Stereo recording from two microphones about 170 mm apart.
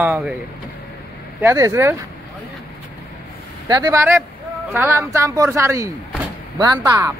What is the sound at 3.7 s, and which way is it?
Speech, 20° right (ahead or behind).